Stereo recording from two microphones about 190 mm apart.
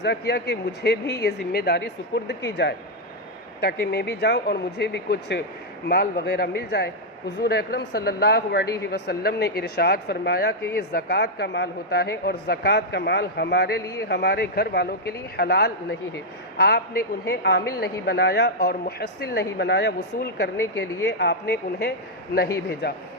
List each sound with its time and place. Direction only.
0.0 s a man's voice: 65° left (ahead or behind)